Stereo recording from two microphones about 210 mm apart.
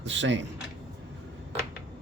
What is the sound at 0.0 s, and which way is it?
Speech, 60° right (ahead or behind).